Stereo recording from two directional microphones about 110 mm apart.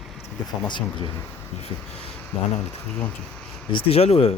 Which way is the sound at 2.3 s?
75° left (ahead or behind).